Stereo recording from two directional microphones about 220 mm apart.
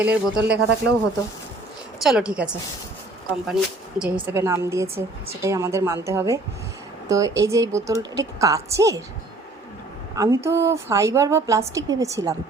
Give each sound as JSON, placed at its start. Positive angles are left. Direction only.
{"t": 0.0, "sound": "a woman's voice", "side_deg": -5}
{"t": 2.0, "sound": "a woman's voice", "side_deg": -5}
{"t": 10.2, "sound": "a woman's voice", "side_deg": -15}